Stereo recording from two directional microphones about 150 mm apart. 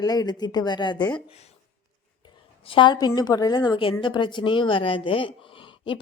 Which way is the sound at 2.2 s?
30° left (ahead or behind).